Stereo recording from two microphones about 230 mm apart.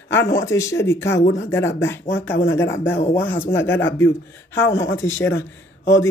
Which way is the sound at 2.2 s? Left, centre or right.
Left.